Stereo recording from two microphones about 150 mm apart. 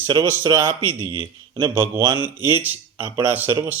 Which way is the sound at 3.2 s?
10° right (ahead or behind).